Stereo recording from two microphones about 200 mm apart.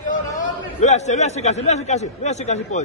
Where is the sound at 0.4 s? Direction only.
35° left (ahead or behind).